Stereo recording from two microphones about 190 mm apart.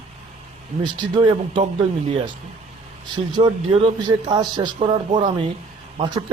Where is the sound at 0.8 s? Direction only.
25° right (ahead or behind).